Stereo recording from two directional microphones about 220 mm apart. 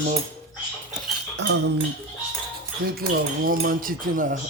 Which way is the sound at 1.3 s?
55° right (ahead or behind).